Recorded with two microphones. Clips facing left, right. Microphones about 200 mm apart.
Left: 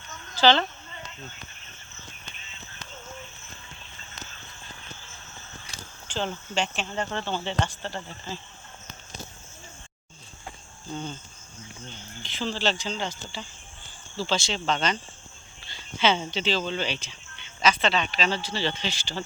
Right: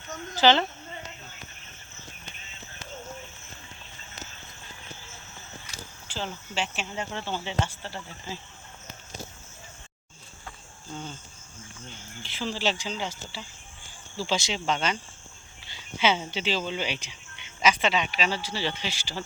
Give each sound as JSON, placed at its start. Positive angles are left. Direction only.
{"t": 0.3, "sound": "a woman's voice", "side_deg": -20}
{"t": 6.1, "sound": "speech", "side_deg": -5}
{"t": 12.2, "sound": "speech", "side_deg": -10}